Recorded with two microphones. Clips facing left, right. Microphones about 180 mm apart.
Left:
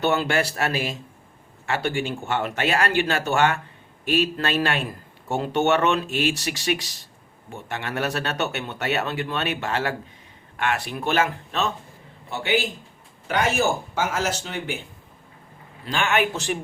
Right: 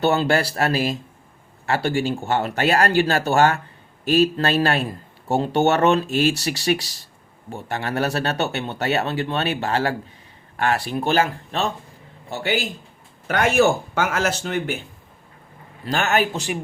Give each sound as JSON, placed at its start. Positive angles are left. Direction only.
{"t": 0.0, "sound": "a man's voice", "side_deg": -35}
{"t": 13.2, "sound": "speech", "side_deg": -55}
{"t": 15.9, "sound": "a man's voice", "side_deg": -40}
{"t": 16.3, "sound": "speech", "side_deg": -10}